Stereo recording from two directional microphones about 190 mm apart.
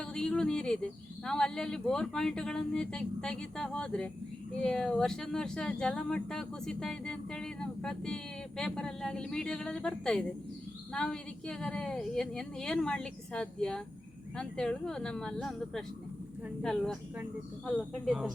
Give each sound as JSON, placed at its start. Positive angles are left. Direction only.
{"t": 0.0, "sound": "speech", "side_deg": 5}